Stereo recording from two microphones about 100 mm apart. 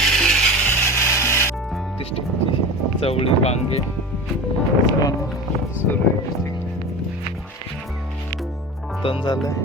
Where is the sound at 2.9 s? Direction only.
75° left (ahead or behind).